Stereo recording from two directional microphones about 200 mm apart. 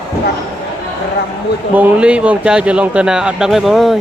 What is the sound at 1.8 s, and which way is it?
Speech, 5° right (ahead or behind).